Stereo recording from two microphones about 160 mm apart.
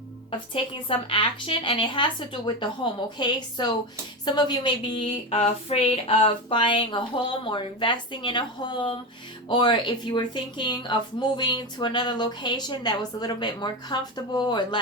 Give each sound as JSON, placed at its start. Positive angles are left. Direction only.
{"t": 0.3, "sound": "a woman's voice", "side_deg": 35}